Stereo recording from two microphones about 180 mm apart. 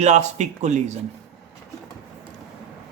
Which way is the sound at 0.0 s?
40° right (ahead or behind).